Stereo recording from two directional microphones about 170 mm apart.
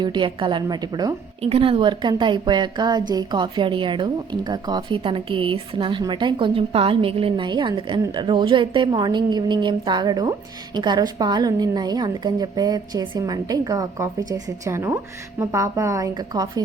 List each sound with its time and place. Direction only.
0.0 s a woman's voice: 25° right (ahead or behind)
1.4 s a woman's voice: 35° right (ahead or behind)